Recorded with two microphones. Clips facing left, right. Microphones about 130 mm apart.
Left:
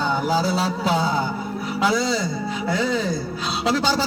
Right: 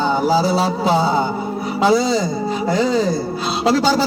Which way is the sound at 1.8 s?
40° right (ahead or behind).